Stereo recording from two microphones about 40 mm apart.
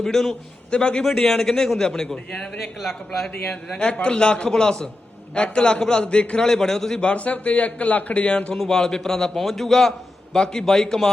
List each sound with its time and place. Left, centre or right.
0.0 s a man's voice: centre
0.7 s a man's voice: left
1.2 s a man's voice: centre
2.6 s a man's voice: centre
3.8 s a man's voice: left
6.4 s a man's voice: centre
7.0 s a man's voice: left
8.5 s a man's voice: centre
10.3 s a man's voice: centre